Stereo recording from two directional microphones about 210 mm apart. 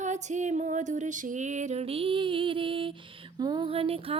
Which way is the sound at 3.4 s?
20° right (ahead or behind).